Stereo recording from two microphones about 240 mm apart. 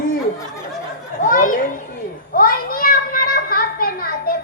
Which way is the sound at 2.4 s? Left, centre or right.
Left.